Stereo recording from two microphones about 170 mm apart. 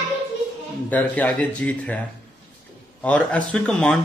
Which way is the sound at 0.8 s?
10° left (ahead or behind).